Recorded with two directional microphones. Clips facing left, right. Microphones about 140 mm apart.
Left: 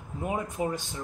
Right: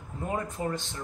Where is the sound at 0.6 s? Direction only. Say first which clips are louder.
Left 4 dB; 15° left (ahead or behind).